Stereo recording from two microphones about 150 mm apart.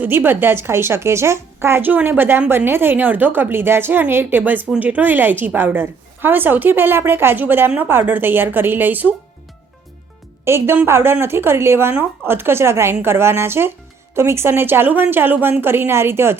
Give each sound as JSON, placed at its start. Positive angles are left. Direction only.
{"t": 0.0, "sound": "a woman's voice", "side_deg": -15}
{"t": 10.4, "sound": "a woman's voice", "side_deg": -15}